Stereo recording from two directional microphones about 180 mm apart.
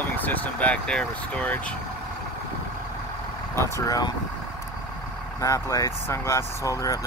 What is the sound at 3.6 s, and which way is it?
Speech, 20° left (ahead or behind).